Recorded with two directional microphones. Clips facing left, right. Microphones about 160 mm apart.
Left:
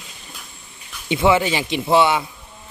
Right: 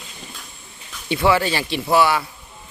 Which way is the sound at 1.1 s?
20° left (ahead or behind).